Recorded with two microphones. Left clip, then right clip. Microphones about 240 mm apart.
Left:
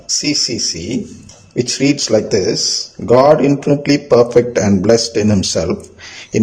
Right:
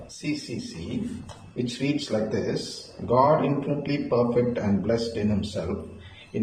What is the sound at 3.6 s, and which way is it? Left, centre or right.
A man's voice, left.